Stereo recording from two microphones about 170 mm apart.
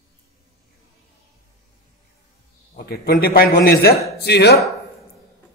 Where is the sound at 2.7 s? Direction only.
65° left (ahead or behind).